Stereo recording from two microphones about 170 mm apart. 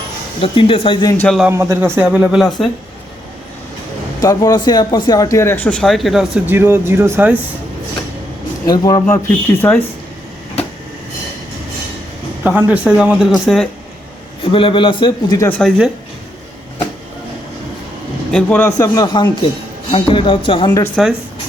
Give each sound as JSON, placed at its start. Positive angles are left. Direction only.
{"t": 0.3, "sound": "a man's voice", "side_deg": 30}
{"t": 1.1, "sound": "speech", "side_deg": 10}
{"t": 1.5, "sound": "speech", "side_deg": -15}
{"t": 4.2, "sound": "speech", "side_deg": 20}
{"t": 8.6, "sound": "a man's voice", "side_deg": 20}
{"t": 9.1, "sound": "speech", "side_deg": 10}
{"t": 12.4, "sound": "speech", "side_deg": -10}
{"t": 14.4, "sound": "a man's voice", "side_deg": 30}
{"t": 15.4, "sound": "speech", "side_deg": 5}
{"t": 18.3, "sound": "speech", "side_deg": 5}
{"t": 18.8, "sound": "a man's voice", "side_deg": 20}